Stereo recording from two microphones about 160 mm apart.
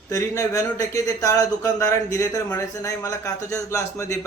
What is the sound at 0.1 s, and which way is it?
Speech, 20° left (ahead or behind).